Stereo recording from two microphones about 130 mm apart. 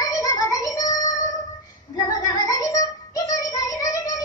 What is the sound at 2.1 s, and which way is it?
Child singing, 25° left (ahead or behind).